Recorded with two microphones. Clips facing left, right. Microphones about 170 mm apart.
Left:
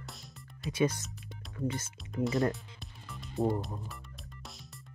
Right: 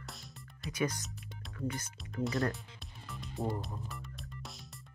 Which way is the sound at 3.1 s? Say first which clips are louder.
Left 6 dB; centre (ahead or behind).